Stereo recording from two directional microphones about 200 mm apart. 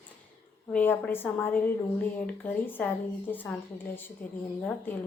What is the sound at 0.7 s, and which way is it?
A woman's voice, 10° left (ahead or behind).